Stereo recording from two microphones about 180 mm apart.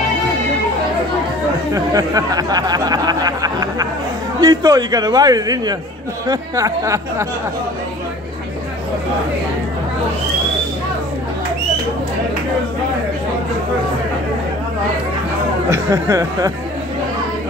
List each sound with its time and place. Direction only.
1.7 s a man's voice: 20° right (ahead or behind)
15.7 s speech: 15° right (ahead or behind)